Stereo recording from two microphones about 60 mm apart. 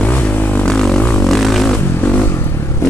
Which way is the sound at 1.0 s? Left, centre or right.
Left.